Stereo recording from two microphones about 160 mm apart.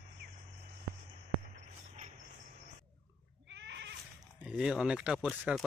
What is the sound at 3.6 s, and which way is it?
Goat, 90° right.